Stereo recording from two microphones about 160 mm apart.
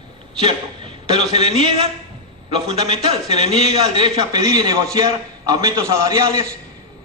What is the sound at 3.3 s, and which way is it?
Speech, 40° left (ahead or behind).